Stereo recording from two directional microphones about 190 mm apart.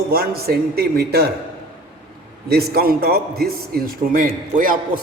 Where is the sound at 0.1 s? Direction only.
55° right (ahead or behind).